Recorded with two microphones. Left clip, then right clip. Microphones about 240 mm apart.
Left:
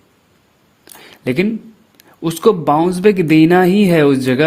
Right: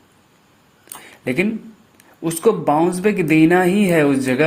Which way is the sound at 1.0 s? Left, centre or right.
Left.